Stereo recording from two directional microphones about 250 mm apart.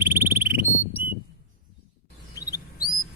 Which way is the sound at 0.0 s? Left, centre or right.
Centre.